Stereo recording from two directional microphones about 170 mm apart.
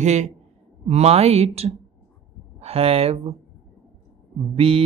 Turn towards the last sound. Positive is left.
turn(degrees=-35)  # may be behind; listen again after turning